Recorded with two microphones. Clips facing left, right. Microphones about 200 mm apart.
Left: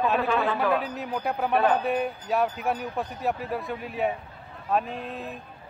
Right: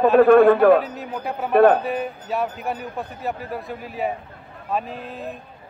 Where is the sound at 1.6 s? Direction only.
55° right (ahead or behind).